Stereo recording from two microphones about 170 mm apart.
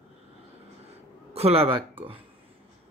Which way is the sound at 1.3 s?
35° right (ahead or behind).